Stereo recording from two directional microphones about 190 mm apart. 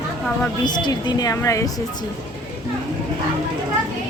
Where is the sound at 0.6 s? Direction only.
20° left (ahead or behind).